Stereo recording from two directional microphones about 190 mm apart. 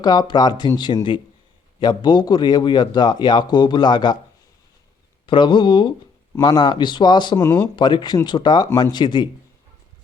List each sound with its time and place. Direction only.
0.0 s a man's voice: 20° left (ahead or behind)
5.2 s a man's voice: 25° left (ahead or behind)